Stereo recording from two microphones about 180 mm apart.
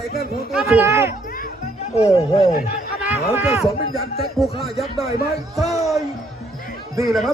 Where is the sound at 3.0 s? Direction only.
10° right (ahead or behind).